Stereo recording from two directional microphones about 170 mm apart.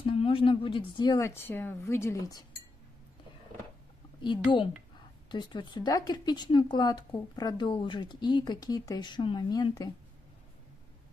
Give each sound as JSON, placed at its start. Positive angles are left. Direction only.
{"t": 0.0, "sound": "speech", "side_deg": 35}
{"t": 4.2, "sound": "speech", "side_deg": 30}